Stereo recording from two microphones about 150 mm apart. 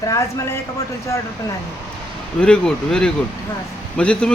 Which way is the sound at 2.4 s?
5° left (ahead or behind).